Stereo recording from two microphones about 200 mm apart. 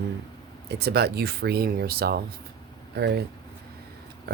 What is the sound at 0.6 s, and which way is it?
Speech, 55° right (ahead or behind).